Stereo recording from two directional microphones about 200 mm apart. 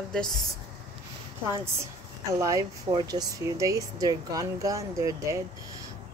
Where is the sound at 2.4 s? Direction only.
15° right (ahead or behind).